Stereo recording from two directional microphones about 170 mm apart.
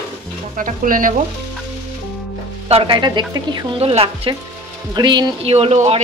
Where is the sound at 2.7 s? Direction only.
30° right (ahead or behind).